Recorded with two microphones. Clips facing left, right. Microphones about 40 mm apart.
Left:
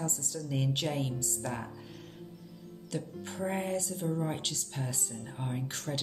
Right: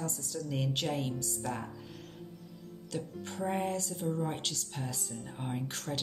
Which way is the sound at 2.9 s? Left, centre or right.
Centre.